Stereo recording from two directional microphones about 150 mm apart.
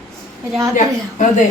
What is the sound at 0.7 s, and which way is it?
Speech, 55° left (ahead or behind).